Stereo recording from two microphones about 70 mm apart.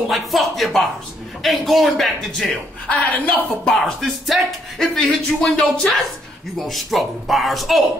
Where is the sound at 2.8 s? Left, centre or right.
Left.